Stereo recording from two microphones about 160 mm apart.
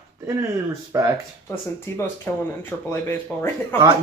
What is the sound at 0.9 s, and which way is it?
Speech, 20° right (ahead or behind).